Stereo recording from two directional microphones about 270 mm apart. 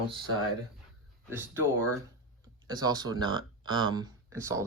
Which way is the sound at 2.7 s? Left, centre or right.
Centre.